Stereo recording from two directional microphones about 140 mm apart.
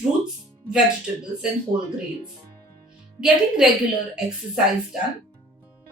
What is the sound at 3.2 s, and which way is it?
Speech, 5° right (ahead or behind).